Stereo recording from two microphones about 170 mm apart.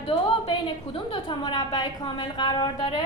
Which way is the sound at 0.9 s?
30° left (ahead or behind).